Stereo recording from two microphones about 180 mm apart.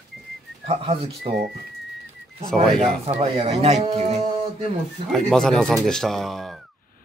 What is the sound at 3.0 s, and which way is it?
Speech, 35° right (ahead or behind).